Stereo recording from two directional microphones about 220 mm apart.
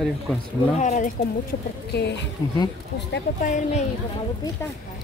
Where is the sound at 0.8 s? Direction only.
35° left (ahead or behind).